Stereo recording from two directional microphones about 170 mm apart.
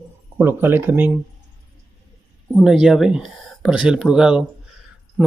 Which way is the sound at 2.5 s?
5° right (ahead or behind).